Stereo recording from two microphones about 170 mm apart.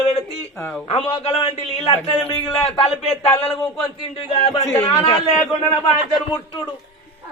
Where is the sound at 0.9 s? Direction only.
35° left (ahead or behind).